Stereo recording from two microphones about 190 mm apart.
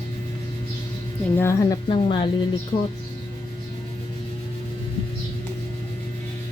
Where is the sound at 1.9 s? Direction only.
25° left (ahead or behind).